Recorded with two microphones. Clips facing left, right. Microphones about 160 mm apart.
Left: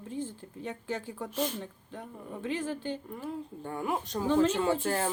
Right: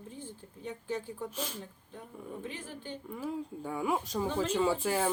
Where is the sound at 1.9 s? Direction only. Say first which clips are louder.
Left 1 dB; 90° left.